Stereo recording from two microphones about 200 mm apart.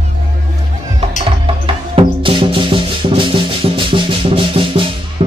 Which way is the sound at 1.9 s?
25° right (ahead or behind).